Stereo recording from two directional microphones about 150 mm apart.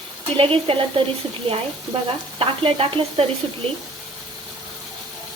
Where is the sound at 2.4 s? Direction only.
35° right (ahead or behind).